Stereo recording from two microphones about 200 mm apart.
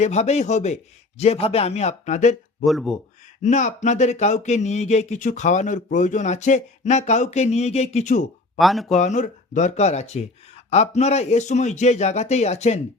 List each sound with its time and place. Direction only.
0.0 s speech: 35° left (ahead or behind)
2.6 s speech: centre (ahead or behind)
3.4 s speech: 35° left (ahead or behind)
8.5 s speech: centre (ahead or behind)
9.0 s speech: 35° left (ahead or behind)